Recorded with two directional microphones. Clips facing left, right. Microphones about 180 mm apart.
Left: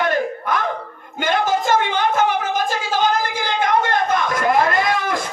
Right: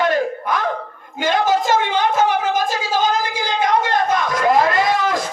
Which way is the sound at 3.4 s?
55° left (ahead or behind).